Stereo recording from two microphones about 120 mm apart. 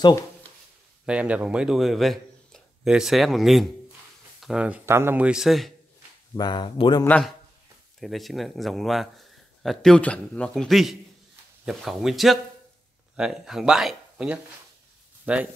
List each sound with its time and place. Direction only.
1.0 s speech: 10° right (ahead or behind)
4.8 s a man's voice: 20° right (ahead or behind); by 5.7 s 5° right (ahead or behind)
6.3 s speech: 40° left (ahead or behind)
7.1 s a man's voice: 5° left (ahead or behind); by 15.4 s 10° right (ahead or behind)